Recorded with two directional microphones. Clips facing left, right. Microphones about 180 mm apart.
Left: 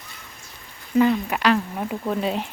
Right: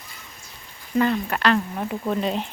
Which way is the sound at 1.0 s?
5° left (ahead or behind).